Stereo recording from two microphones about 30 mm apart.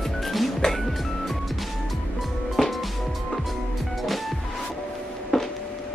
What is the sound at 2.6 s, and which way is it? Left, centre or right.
Music, centre.